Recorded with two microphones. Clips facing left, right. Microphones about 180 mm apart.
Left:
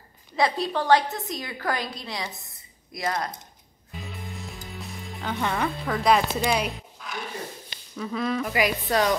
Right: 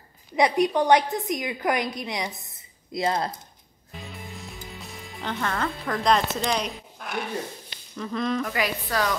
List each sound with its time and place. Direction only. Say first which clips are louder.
0.4 s a woman's voice: right 4 dB; 20° right (ahead or behind)
4.0 s music: left 1 dB; centre (ahead or behind)
5.4 s speech: left 2 dB; 15° left (ahead or behind)
5.9 s speech: left 1 dB; 5° left (ahead or behind)
7.0 s dog: right 3 dB; 55° right (ahead or behind)
7.9 s speech: even; 5° left (ahead or behind); by 9.1 s 20° left (ahead or behind)